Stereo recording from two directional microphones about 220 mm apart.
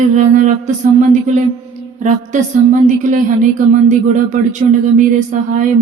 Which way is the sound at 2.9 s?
35° right (ahead or behind).